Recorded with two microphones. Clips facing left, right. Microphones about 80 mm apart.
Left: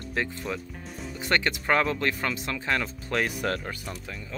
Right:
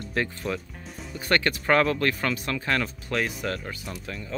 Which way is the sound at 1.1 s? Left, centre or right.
Centre.